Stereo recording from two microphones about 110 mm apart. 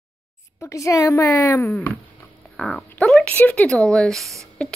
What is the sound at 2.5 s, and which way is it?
A woman's voice, 5° left (ahead or behind).